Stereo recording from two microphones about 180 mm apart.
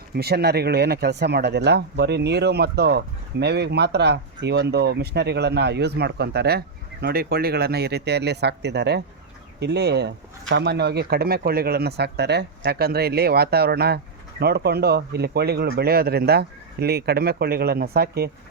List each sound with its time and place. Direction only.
0.1 s speech: 60° right (ahead or behind)